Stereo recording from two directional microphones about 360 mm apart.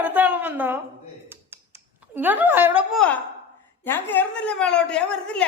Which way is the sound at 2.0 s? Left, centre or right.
Centre.